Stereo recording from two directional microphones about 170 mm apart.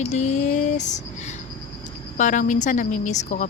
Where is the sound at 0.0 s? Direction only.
45° left (ahead or behind).